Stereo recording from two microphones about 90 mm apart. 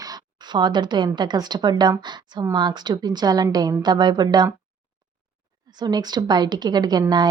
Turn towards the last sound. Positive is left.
turn(degrees=-50)  # may be behind; listen again after turning